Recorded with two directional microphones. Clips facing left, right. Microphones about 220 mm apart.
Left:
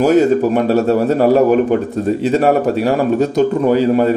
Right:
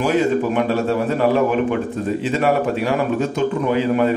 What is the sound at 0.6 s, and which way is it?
A man's voice, 40° left (ahead or behind).